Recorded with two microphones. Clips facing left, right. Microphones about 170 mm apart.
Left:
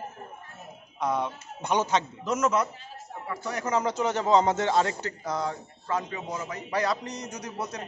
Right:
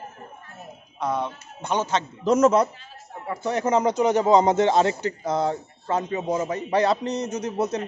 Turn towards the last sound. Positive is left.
turn(degrees=-25)  # may be behind; listen again after turning